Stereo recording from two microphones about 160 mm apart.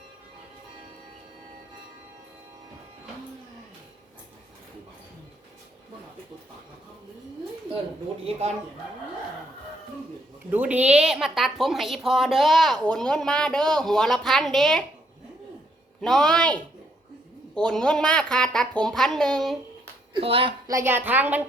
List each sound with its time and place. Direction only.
8.3 s speech: 40° right (ahead or behind)
10.5 s speech: 10° right (ahead or behind)
16.0 s speech: centre (ahead or behind)
20.1 s speech: 35° right (ahead or behind)
20.7 s a woman's voice: 15° right (ahead or behind)